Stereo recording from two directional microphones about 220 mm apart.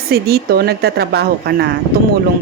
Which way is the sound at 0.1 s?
45° right (ahead or behind).